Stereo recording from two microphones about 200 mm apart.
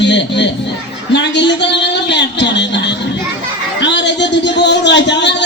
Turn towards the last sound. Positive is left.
turn(degrees=60)  # may be behind; listen again after turning